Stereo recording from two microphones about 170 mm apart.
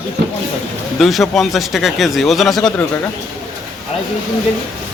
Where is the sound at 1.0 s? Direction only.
Centre (ahead or behind).